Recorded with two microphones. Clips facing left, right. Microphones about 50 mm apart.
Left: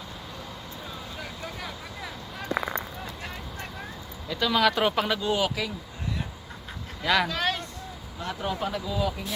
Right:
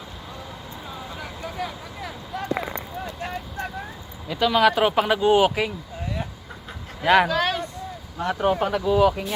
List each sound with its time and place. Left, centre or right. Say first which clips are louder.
1.2 s vehicle: right 7 dB; centre
3.2 s vehicle: right 7 dB; centre
4.3 s speech: right 5 dB; centre
5.1 s speech: right 8 dB; right
7.0 s speech: right 7 dB; right
7.3 s speech: right 5 dB; centre
8.2 s speech: right 8 dB; right